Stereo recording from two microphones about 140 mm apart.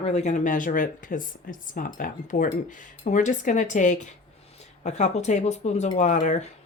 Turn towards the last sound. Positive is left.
turn(degrees=60)  # may be behind; listen again after turning